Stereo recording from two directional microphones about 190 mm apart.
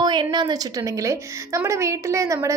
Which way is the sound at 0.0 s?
25° right (ahead or behind).